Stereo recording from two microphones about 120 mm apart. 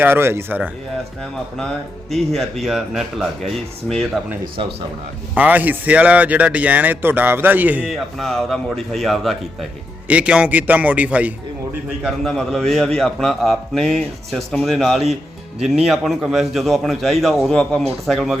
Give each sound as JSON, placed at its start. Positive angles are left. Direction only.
{"t": 0.0, "sound": "a man's voice", "side_deg": -20}
{"t": 2.0, "sound": "speech", "side_deg": 0}
{"t": 5.3, "sound": "a man's voice", "side_deg": -15}
{"t": 7.9, "sound": "speech", "side_deg": 0}
{"t": 10.1, "sound": "a man's voice", "side_deg": -10}
{"t": 12.0, "sound": "speech", "side_deg": 0}